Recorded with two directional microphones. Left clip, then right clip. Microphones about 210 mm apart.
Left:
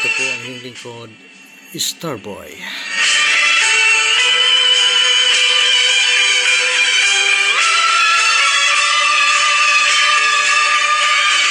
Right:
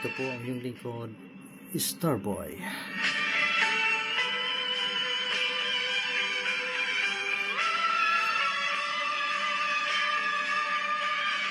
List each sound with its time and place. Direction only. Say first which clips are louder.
0.0 s music: left 16 dB; 35° left (ahead or behind)
2.9 s music: left 15 dB; 35° left (ahead or behind)